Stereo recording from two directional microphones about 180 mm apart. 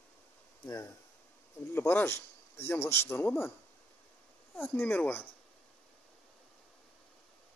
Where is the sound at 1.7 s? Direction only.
10° left (ahead or behind).